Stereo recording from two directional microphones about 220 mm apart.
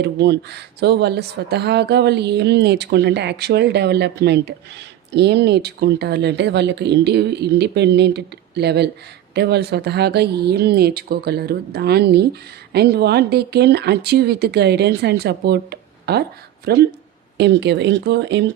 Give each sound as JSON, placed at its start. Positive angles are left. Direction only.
{"t": 0.0, "sound": "speech", "side_deg": -50}